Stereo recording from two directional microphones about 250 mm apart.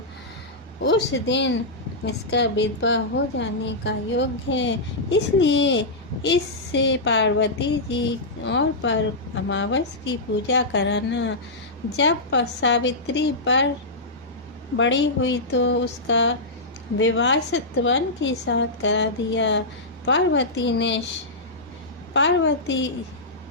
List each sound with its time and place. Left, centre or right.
0.8 s a woman's voice: left
14.8 s a woman's voice: left
22.1 s a woman's voice: left